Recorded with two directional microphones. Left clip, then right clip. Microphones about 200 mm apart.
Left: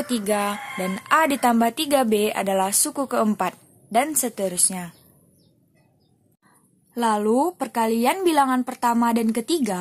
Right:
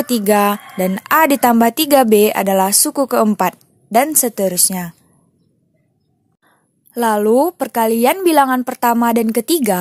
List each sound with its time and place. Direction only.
0.0 s speech: 45° right (ahead or behind)
6.4 s speech: 35° right (ahead or behind)